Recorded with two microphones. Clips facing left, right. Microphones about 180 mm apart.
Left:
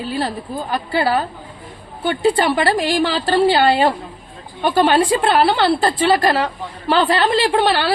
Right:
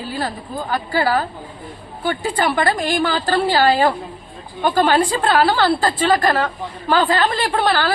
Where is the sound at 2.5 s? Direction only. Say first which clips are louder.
Left 2 dB; 25° left (ahead or behind).